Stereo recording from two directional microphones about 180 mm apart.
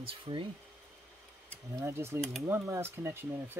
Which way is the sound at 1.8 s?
15° right (ahead or behind).